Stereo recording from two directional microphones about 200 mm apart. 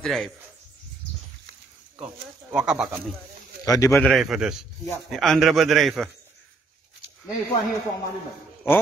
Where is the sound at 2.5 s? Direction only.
5° right (ahead or behind).